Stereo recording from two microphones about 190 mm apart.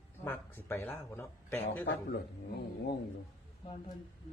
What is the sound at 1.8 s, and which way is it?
Speech, 55° left (ahead or behind).